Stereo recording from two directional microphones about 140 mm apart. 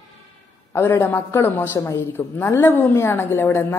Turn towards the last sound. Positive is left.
turn(degrees=15)  # may be behind; listen again after turning